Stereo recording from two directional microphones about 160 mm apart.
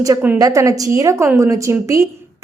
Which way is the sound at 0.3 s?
20° right (ahead or behind).